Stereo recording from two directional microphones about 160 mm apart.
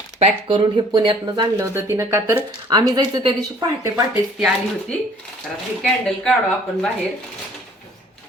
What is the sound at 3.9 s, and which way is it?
Speech, 15° right (ahead or behind).